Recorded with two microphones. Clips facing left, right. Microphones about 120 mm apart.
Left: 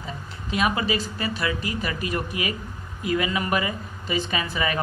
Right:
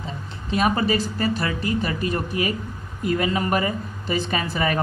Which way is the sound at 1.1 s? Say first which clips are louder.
Right 3 dB; 40° right (ahead or behind).